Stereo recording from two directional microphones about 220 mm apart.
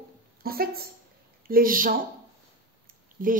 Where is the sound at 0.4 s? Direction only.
45° right (ahead or behind).